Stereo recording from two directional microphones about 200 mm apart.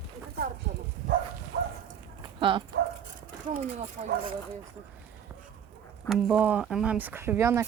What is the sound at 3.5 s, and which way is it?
Speech, 35° right (ahead or behind).